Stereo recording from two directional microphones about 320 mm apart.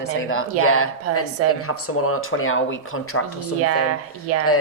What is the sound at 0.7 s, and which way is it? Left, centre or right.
Speech, left.